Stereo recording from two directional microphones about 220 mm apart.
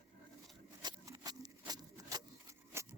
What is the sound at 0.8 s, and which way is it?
Rub, 15° right (ahead or behind).